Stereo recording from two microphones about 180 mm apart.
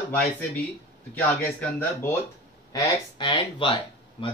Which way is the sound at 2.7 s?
25° left (ahead or behind).